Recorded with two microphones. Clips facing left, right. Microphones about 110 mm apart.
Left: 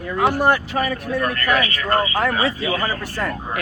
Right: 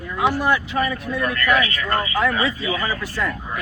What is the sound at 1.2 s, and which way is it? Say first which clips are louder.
Speech: right 1 dB; 40° left (ahead or behind).